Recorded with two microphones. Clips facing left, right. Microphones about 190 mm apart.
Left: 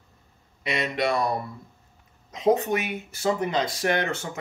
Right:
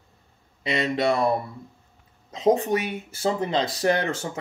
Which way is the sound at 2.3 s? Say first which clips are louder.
Right 1 dB; 25° right (ahead or behind).